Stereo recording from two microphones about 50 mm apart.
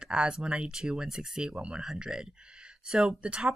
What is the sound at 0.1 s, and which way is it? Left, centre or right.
Speech, centre.